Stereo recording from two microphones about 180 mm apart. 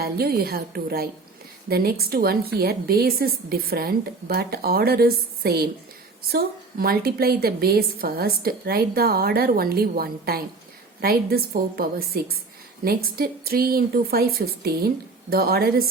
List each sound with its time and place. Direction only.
0.0 s a woman's voice: 60° right (ahead or behind)